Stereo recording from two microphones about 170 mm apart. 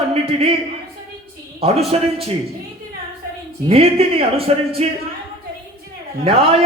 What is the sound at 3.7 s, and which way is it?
A man's voice, 35° right (ahead or behind).